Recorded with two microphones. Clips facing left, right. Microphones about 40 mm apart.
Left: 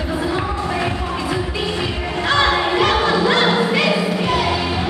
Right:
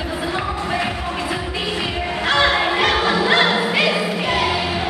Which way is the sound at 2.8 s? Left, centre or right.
Centre.